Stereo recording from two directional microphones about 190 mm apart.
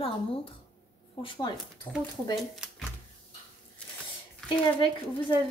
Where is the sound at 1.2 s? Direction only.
25° left (ahead or behind).